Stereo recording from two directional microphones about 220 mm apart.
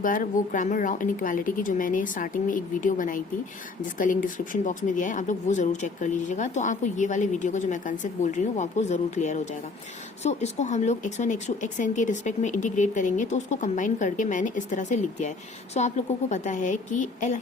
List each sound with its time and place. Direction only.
0.0 s speech: 40° left (ahead or behind)